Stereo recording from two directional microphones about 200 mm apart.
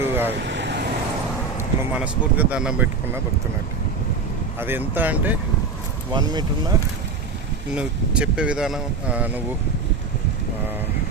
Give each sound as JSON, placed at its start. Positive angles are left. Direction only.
{"t": 0.0, "sound": "vehicle", "side_deg": -10}
{"t": 0.3, "sound": "vehicle", "side_deg": -60}
{"t": 1.5, "sound": "speech", "side_deg": -10}
{"t": 4.6, "sound": "speech", "side_deg": -10}
{"t": 6.1, "sound": "speech", "side_deg": -20}
{"t": 7.7, "sound": "speech", "side_deg": -5}